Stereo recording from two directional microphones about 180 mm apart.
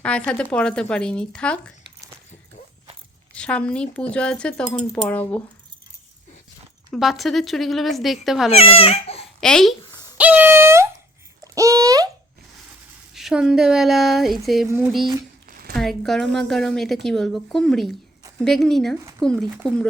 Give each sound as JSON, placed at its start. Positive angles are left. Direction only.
{"t": 0.3, "sound": "speech", "side_deg": 5}
{"t": 3.3, "sound": "speech", "side_deg": 5}
{"t": 6.9, "sound": "speech", "side_deg": 0}
{"t": 8.5, "sound": "speech", "side_deg": 35}
{"t": 9.4, "sound": "speech", "side_deg": 5}
{"t": 10.2, "sound": "a sound", "side_deg": -10}
{"t": 13.1, "sound": "speech", "side_deg": -5}
{"t": 15.7, "sound": "speech", "side_deg": 0}